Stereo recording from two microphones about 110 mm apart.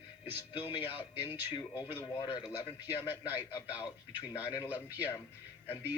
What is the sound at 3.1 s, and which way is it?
Speech, 20° right (ahead or behind).